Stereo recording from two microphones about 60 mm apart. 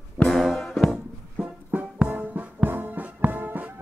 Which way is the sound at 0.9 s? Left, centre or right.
Centre.